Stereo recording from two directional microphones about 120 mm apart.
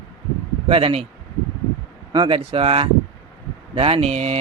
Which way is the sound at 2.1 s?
45° right (ahead or behind).